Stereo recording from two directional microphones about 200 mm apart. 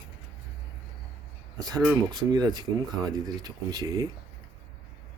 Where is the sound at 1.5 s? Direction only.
20° right (ahead or behind).